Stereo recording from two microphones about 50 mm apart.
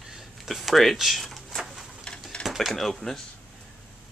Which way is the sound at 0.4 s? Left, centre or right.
Centre.